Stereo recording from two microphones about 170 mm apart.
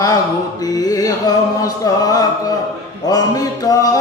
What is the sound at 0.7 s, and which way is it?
Music, 20° left (ahead or behind).